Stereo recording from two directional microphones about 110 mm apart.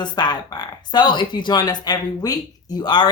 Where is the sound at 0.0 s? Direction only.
40° left (ahead or behind).